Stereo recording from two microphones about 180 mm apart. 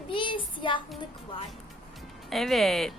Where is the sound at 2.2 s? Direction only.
Centre (ahead or behind).